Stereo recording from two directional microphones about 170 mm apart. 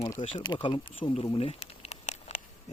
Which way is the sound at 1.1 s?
30° left (ahead or behind).